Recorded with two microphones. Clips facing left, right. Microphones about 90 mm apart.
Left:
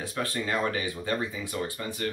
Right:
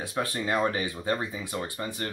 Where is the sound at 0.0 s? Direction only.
20° right (ahead or behind).